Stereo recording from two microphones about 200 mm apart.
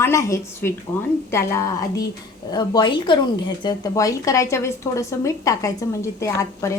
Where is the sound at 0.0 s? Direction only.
15° left (ahead or behind).